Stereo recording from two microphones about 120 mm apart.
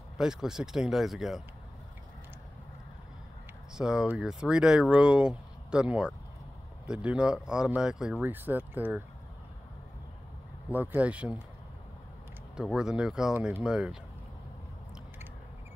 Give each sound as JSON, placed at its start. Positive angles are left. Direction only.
{"t": 0.2, "sound": "speech", "side_deg": -5}
{"t": 3.7, "sound": "speech", "side_deg": -5}
{"t": 8.2, "sound": "speech", "side_deg": -15}
{"t": 10.7, "sound": "speech", "side_deg": -15}
{"t": 12.5, "sound": "speech", "side_deg": -5}